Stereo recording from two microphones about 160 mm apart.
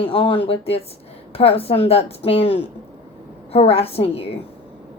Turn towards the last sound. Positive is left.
turn(degrees=40)  # may be behind; listen again after turning